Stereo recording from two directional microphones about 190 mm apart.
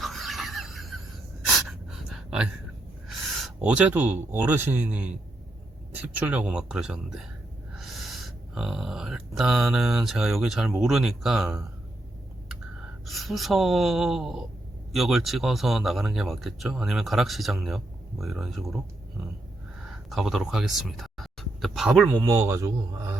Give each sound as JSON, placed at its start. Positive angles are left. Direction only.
{"t": 0.0, "sound": "a sound", "side_deg": 0}
{"t": 1.5, "sound": "gasp", "side_deg": 0}
{"t": 3.4, "sound": "a man's voice", "side_deg": -5}
{"t": 13.1, "sound": "a man's voice", "side_deg": 0}
{"t": 19.9, "sound": "speech", "side_deg": 0}
{"t": 22.3, "sound": "a man's voice", "side_deg": -15}